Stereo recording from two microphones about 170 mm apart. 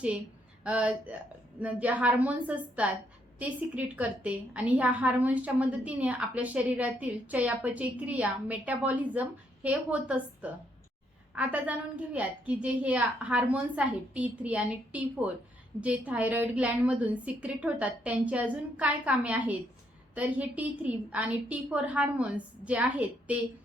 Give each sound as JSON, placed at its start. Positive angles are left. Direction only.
{"t": 0.6, "sound": "a woman's voice", "side_deg": -5}